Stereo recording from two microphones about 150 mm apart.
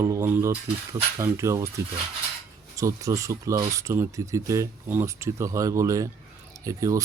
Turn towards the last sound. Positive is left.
turn(degrees=-20)  # may be behind; listen again after turning